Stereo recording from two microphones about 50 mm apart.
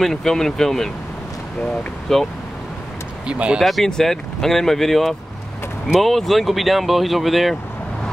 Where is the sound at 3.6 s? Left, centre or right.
Centre.